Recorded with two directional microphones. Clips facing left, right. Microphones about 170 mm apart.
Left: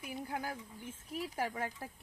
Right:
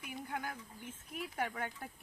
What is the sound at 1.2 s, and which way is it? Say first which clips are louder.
Speech: left 2 dB; 30° left (ahead or behind).